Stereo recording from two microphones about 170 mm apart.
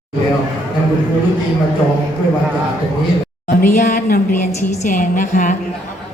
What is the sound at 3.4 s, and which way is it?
A woman's voice, 55° left (ahead or behind).